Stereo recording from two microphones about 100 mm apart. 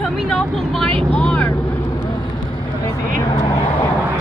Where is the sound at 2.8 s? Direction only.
30° left (ahead or behind).